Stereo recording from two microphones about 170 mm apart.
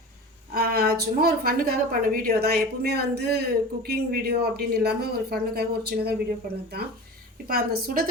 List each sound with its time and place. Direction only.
0.5 s a woman's voice: 65° right (ahead or behind)
7.4 s a woman's voice: 60° right (ahead or behind)